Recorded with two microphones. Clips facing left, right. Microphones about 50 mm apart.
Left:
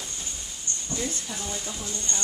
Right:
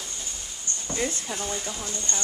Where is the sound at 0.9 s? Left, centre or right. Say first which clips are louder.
Right 3 dB; right.